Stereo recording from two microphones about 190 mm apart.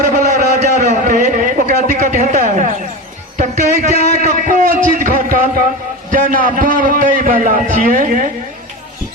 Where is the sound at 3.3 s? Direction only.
45° right (ahead or behind).